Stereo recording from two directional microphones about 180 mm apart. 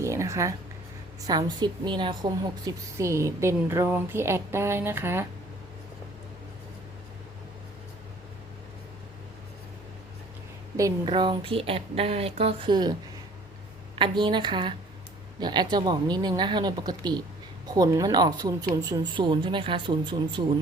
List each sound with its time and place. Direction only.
0.0 s a sound: 15° right (ahead or behind)
1.3 s a woman's voice: 25° right (ahead or behind)
10.8 s speech: 20° right (ahead or behind)